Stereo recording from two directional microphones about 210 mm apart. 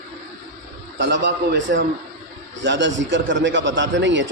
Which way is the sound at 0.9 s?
60° right (ahead or behind).